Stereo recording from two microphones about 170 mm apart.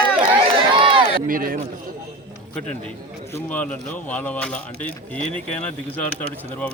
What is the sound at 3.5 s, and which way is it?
A man's voice, 10° left (ahead or behind).